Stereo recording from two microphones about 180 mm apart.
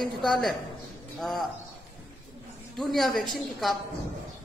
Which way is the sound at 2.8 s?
Centre (ahead or behind).